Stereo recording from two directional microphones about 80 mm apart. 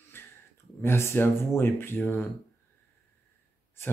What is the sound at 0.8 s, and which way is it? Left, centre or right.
Speech, left.